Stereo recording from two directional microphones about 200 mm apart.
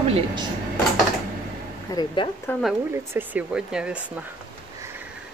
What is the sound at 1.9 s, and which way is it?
Speech, 15° left (ahead or behind).